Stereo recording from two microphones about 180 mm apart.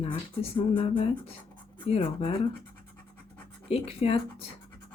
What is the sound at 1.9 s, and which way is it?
Speech, 35° left (ahead or behind).